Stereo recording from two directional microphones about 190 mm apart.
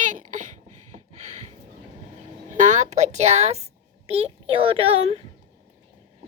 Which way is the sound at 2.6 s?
40° right (ahead or behind).